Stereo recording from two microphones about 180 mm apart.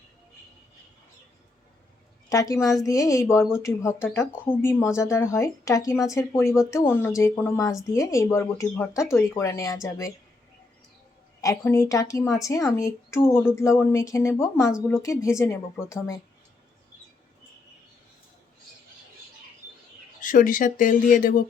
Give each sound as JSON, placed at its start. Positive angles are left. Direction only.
{"t": 2.3, "sound": "a woman's voice", "side_deg": 20}
{"t": 11.3, "sound": "speech", "side_deg": 20}
{"t": 20.2, "sound": "speech", "side_deg": 50}